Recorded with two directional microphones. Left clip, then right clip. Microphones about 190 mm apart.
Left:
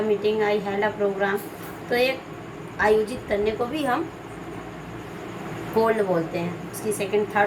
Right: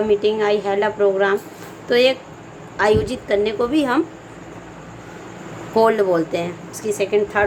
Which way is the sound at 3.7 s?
55° right (ahead or behind).